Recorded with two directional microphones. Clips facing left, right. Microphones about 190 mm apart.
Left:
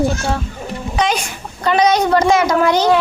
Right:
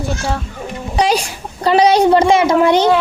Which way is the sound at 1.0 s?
35° right (ahead or behind).